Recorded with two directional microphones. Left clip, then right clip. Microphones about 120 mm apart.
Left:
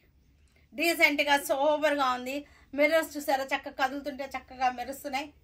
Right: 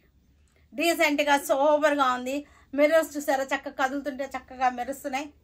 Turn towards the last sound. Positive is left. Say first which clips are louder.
# right 3 dB
turn(degrees=0)  # may be behind; listen again after turning